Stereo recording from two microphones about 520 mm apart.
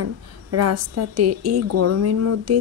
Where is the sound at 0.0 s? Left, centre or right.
Right.